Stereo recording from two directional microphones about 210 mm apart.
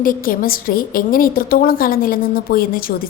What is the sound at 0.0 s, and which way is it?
A woman's voice, 40° left (ahead or behind).